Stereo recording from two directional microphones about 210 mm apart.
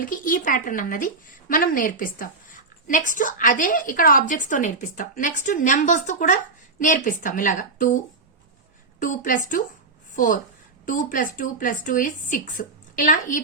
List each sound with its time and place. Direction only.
0.0 s a woman's voice: 40° left (ahead or behind)
9.0 s a woman's voice: 40° left (ahead or behind)